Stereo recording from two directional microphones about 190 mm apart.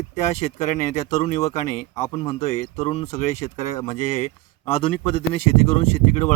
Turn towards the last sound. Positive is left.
turn(degrees=35)  # may be behind; listen again after turning